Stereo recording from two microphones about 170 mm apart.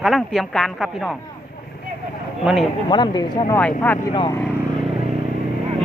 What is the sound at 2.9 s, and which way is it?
Speech, 25° left (ahead or behind).